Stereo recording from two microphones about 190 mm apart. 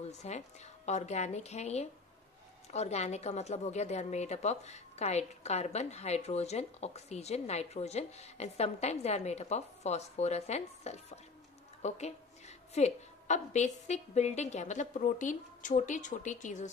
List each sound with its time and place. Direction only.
0.2 s a woman's voice: 35° left (ahead or behind)